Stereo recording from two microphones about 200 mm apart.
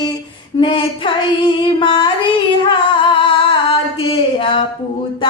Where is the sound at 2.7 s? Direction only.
25° left (ahead or behind).